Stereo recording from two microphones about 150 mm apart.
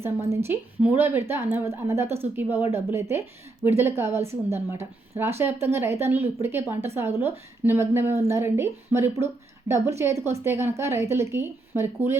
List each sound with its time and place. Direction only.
0.3 s a woman's voice: 15° right (ahead or behind)